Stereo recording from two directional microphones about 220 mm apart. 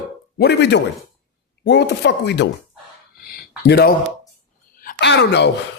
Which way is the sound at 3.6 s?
50° left (ahead or behind).